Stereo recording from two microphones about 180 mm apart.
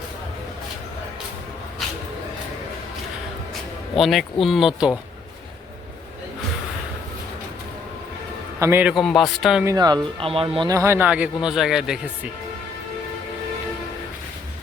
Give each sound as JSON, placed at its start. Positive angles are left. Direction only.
{"t": 3.9, "sound": "speech", "side_deg": 0}
{"t": 8.5, "sound": "speech", "side_deg": -15}
{"t": 9.6, "sound": "speech", "side_deg": -20}
{"t": 10.7, "sound": "a man's voice", "side_deg": -15}